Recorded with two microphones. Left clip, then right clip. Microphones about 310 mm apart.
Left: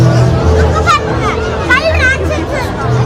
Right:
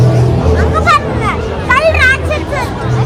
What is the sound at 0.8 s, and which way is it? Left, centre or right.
Music, right.